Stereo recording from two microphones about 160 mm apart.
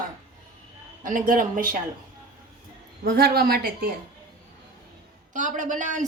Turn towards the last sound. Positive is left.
turn(degrees=-50)  # may be behind; listen again after turning